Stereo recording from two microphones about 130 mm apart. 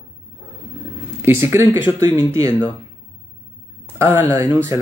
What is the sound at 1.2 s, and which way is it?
Speech, 20° right (ahead or behind).